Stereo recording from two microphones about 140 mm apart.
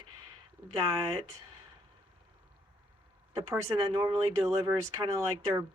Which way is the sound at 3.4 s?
20° right (ahead or behind).